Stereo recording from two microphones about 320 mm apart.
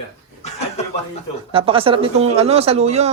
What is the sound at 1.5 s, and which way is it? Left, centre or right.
Speech, centre.